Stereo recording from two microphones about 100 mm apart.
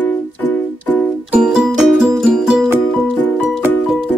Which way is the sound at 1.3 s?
5° right (ahead or behind).